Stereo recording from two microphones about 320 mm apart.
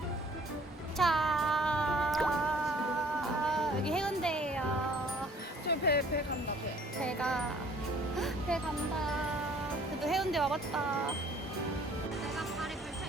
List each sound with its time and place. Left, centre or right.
0.9 s a sound: centre
3.2 s music: centre
5.6 s music: left
7.0 s wind chime: centre
8.2 s music: centre
10.0 s speech: centre